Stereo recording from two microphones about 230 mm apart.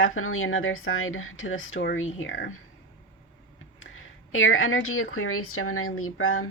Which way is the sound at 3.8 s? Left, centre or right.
Left.